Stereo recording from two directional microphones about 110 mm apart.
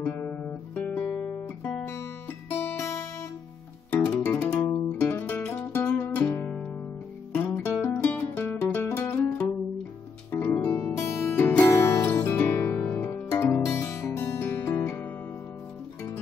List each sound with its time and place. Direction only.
0.0 s guitar: 15° left (ahead or behind)
4.4 s music: 10° left (ahead or behind)